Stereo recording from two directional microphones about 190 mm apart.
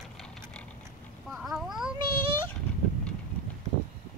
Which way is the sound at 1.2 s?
Centre (ahead or behind).